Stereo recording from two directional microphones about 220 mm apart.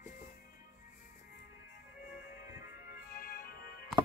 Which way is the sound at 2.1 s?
40° left (ahead or behind).